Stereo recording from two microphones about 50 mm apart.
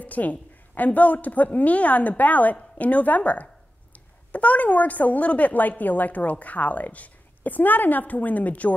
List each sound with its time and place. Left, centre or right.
0.0 s a woman's voice: left